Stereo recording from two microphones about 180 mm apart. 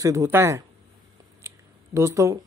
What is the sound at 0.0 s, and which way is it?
Speech, 15° right (ahead or behind).